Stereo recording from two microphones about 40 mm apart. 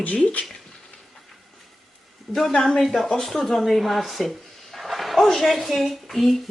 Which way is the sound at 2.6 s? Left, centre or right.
Centre.